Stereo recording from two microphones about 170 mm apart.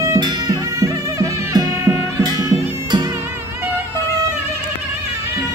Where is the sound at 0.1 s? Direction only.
20° right (ahead or behind).